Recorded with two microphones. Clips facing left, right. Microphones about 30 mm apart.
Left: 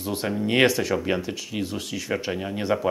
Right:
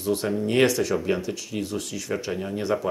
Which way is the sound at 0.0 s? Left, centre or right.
Centre.